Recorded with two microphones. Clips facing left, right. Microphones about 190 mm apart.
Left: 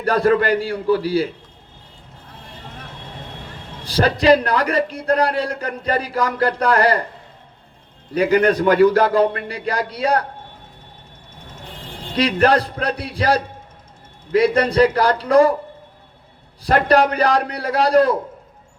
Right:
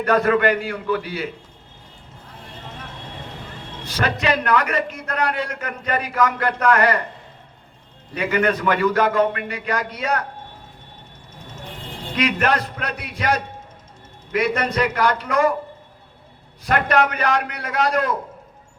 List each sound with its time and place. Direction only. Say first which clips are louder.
0.0 s a man's voice: left 1 dB; 35° left (ahead or behind)
3.8 s a man's voice: left 8 dB; 35° left (ahead or behind)
8.1 s a man's voice: left 5 dB; 35° left (ahead or behind)
12.1 s a man's voice: left 5 dB; 35° left (ahead or behind)
16.6 s a man's voice: left 4 dB; 35° left (ahead or behind)